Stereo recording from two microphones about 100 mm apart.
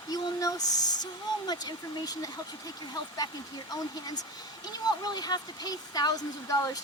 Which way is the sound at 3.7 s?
40° left (ahead or behind).